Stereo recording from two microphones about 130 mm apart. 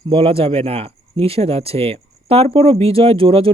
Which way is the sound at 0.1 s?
45° right (ahead or behind).